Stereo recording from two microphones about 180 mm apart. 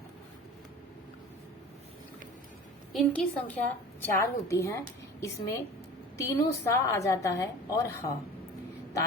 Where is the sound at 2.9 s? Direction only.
5° left (ahead or behind).